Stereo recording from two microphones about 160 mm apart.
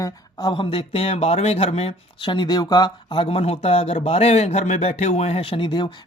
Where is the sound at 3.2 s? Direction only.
40° left (ahead or behind).